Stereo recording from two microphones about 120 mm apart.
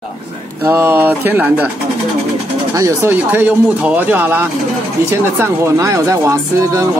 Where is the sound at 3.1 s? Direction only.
15° right (ahead or behind).